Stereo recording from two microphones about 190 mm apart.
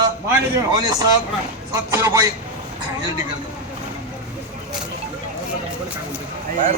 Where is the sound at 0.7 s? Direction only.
20° right (ahead or behind).